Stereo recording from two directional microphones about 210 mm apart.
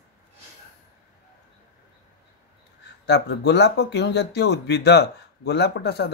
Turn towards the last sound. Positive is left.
turn(degrees=50)  # may be behind; listen again after turning